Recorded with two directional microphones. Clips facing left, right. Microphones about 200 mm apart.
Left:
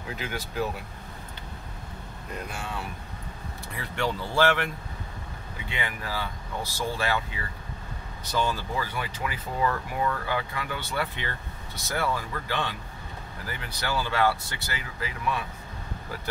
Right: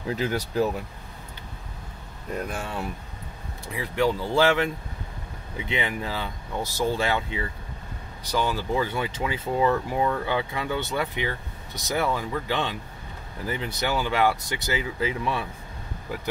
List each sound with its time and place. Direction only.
0.1 s speech: 35° right (ahead or behind)
3.7 s speech: 15° right (ahead or behind)
5.7 s speech: 20° right (ahead or behind)